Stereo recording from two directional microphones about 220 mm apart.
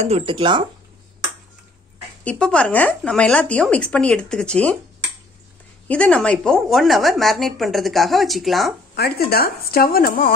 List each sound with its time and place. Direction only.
0.0 s speech: 25° right (ahead or behind)
2.2 s speech: 5° left (ahead or behind)
5.9 s speech: 5° left (ahead or behind)
8.9 s speech: 45° left (ahead or behind)